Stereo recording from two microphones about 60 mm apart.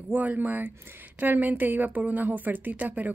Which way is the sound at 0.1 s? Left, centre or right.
Right.